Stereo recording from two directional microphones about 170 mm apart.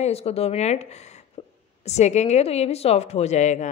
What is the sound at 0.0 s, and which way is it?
A woman's voice, 35° left (ahead or behind).